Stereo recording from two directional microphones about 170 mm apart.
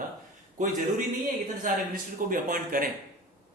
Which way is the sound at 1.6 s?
55° right (ahead or behind).